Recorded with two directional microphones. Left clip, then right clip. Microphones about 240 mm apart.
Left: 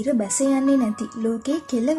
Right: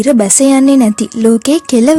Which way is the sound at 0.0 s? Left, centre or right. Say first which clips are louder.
Right 13 dB; right.